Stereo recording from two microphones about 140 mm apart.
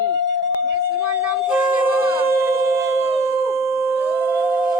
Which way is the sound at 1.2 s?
10° right (ahead or behind).